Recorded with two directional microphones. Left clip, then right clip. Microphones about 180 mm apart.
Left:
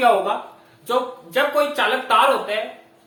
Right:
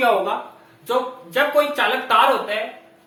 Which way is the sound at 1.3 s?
10° left (ahead or behind).